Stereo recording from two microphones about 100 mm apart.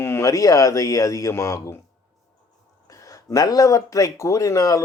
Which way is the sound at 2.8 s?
35° left (ahead or behind).